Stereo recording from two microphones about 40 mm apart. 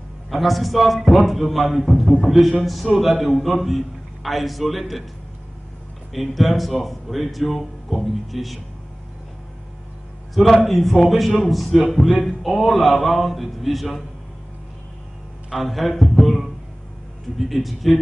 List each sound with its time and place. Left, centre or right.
0.3 s a man's voice: centre
2.0 s a man's voice: centre
2.2 s a man's voice: centre
6.1 s a man's voice: centre
10.3 s a man's voice: centre
15.5 s a man's voice: centre